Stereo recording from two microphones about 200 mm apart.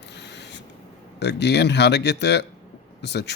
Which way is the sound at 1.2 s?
60° left (ahead or behind).